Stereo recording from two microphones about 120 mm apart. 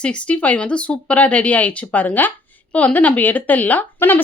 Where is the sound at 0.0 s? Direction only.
10° left (ahead or behind).